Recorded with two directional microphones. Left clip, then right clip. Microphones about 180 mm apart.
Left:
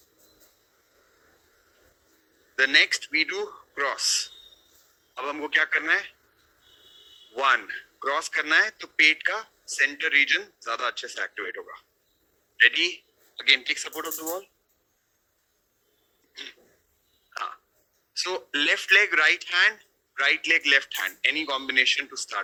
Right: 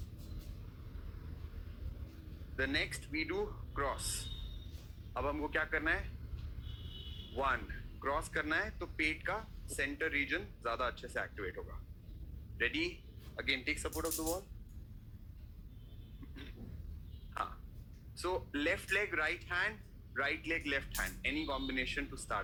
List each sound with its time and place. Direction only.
2.6 s speech: 30° left (ahead or behind)
7.3 s a man's voice: 30° left (ahead or behind)
18.2 s speech: 30° left (ahead or behind)